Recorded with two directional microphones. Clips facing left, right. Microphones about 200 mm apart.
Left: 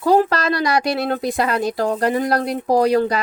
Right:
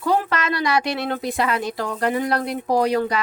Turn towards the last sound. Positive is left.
turn(degrees=35)  # may be behind; listen again after turning